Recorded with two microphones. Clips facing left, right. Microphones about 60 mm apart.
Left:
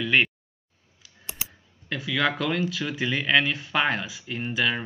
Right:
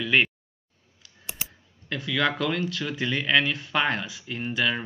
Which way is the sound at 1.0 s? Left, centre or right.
Centre.